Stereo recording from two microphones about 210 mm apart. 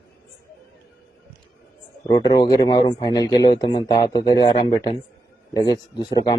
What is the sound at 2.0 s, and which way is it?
Speech, 20° left (ahead or behind).